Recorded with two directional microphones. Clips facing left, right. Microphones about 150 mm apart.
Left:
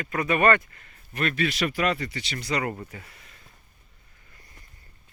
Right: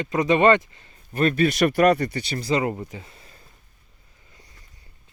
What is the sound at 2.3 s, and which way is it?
Speech, 25° right (ahead or behind).